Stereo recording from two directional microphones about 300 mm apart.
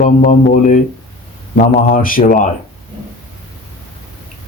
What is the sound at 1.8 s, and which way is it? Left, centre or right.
Speech, left.